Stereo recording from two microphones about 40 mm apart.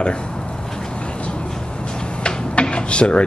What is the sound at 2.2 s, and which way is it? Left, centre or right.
Rub, left.